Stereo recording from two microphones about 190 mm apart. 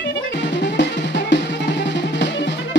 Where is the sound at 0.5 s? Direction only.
60° left (ahead or behind).